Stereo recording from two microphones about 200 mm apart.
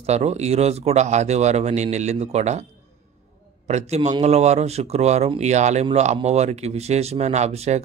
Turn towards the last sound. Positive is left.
turn(degrees=-35)  # may be behind; listen again after turning